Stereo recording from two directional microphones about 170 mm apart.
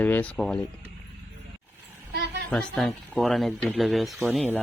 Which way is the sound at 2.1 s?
80° right.